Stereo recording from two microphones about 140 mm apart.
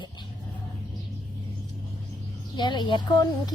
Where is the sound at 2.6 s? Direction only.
30° left (ahead or behind).